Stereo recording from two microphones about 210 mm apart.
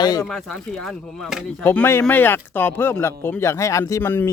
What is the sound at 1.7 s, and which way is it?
Moo, 10° left (ahead or behind).